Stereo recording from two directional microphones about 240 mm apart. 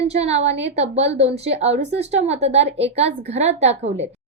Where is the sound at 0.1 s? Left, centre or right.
Right.